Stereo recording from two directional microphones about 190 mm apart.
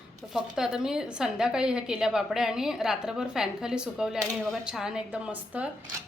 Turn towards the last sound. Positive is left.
turn(degrees=-5)  # may be behind; listen again after turning